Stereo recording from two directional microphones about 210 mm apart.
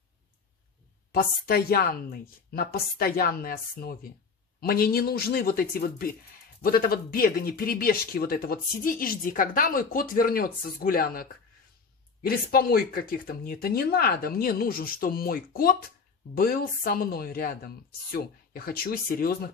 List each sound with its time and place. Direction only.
1.1 s speech: 45° left (ahead or behind)